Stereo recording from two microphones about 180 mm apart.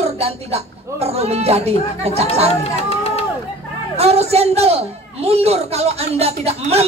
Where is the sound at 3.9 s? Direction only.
35° right (ahead or behind).